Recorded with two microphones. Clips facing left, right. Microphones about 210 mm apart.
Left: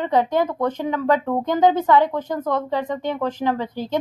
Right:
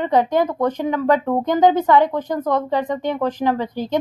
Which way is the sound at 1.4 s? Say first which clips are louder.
Right 2 dB; 15° right (ahead or behind).